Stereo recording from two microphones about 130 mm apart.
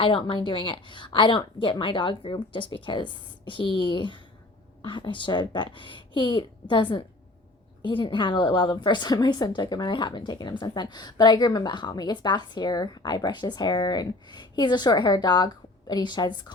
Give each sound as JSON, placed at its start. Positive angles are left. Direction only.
{"t": 0.0, "sound": "a woman's voice", "side_deg": 40}